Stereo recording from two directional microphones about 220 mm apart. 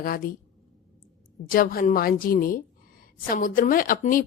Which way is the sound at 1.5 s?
40° left (ahead or behind).